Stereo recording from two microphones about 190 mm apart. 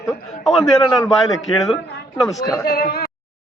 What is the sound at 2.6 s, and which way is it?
Speech, 55° left (ahead or behind).